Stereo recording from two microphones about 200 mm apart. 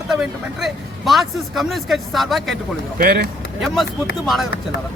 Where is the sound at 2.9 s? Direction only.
45° right (ahead or behind).